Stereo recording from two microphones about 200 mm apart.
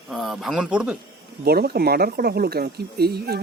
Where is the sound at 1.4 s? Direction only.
50° right (ahead or behind).